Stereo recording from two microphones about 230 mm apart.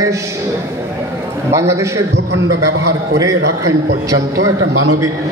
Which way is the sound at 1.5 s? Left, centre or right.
Centre.